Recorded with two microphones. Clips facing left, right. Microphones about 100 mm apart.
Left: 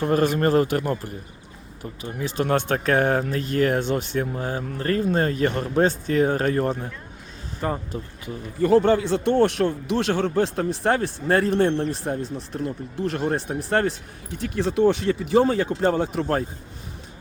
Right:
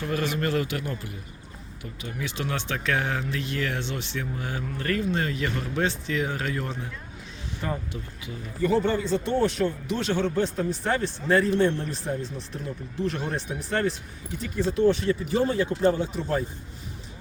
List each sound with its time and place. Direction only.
0.0 s speech: 45° left (ahead or behind)
8.6 s speech: 65° left (ahead or behind)
12.5 s speech: 50° left (ahead or behind)
14.4 s speech: 80° left
15.5 s speech: 60° left (ahead or behind)